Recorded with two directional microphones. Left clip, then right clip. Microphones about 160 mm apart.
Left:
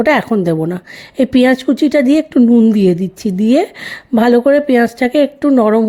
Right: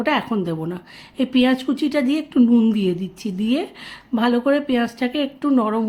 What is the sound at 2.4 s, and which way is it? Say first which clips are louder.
A woman's voice: left 4 dB; 35° left (ahead or behind).